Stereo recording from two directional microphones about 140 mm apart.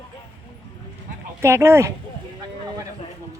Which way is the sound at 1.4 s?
20° right (ahead or behind).